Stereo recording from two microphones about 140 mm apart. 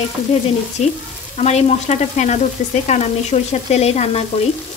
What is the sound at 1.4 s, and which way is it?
Frying, 50° left (ahead or behind).